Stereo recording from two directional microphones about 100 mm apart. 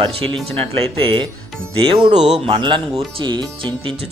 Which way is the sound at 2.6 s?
55° right (ahead or behind).